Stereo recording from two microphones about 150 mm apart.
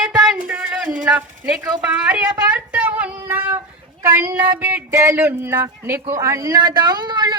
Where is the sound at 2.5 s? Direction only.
10° right (ahead or behind).